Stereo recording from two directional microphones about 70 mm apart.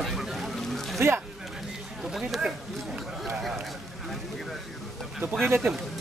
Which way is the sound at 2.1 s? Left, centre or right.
Centre.